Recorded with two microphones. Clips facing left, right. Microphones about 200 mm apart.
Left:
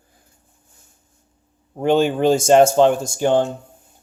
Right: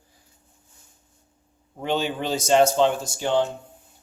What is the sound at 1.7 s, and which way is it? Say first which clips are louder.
Speech: left 9 dB; 50° left (ahead or behind).